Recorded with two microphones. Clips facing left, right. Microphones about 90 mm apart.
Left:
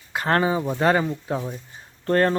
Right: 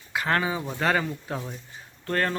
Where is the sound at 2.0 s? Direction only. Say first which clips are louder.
Left 7 dB; 30° left (ahead or behind).